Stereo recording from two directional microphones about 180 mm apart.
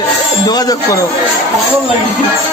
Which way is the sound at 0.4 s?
20° left (ahead or behind).